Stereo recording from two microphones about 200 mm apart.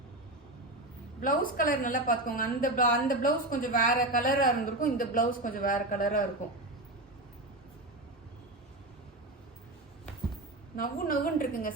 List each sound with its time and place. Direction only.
1.2 s a woman's voice: 45° left (ahead or behind)
10.8 s a woman's voice: 45° left (ahead or behind)